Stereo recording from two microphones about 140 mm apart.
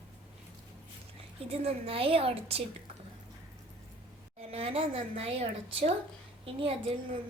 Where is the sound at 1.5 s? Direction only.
45° right (ahead or behind).